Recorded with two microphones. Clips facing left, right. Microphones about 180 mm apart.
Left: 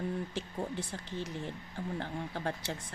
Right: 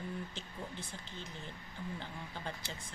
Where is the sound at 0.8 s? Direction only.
90° left.